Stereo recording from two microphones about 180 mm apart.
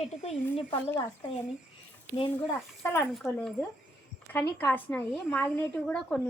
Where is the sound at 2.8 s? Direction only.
15° left (ahead or behind).